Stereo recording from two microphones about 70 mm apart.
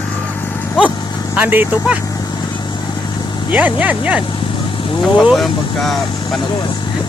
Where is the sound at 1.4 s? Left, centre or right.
Right.